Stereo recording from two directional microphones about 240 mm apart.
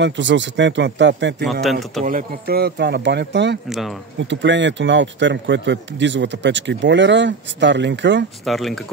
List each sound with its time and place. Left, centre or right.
0.0 s speech: right
1.5 s speech: centre
2.0 s speech: right
3.6 s speech: centre
4.2 s speech: right
8.5 s speech: centre